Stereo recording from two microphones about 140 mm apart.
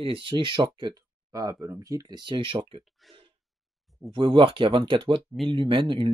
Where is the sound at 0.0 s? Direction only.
40° right (ahead or behind).